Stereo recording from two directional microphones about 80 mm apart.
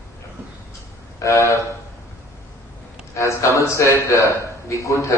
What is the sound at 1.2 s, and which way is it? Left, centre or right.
Speech, left.